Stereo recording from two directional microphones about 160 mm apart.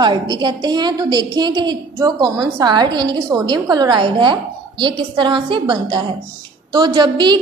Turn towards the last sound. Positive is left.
turn(degrees=-30)  # may be behind; listen again after turning